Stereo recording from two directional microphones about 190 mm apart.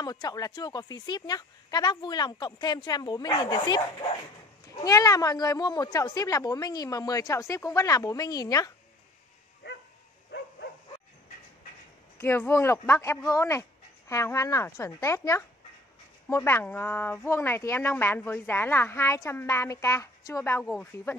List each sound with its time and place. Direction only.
0.0 s a woman's voice: 20° left (ahead or behind)
12.2 s speech: 10° left (ahead or behind)
20.6 s speech: centre (ahead or behind)